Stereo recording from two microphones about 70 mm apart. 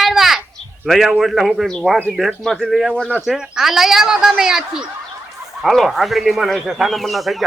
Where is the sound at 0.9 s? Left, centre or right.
Centre.